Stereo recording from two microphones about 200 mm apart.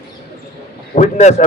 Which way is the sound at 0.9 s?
35° left (ahead or behind).